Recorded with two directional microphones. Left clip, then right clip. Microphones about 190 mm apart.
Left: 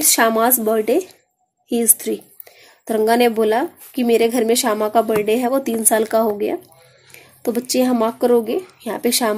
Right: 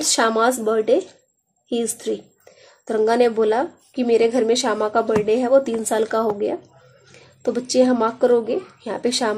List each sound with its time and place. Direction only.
0.0 s speech: 25° left (ahead or behind)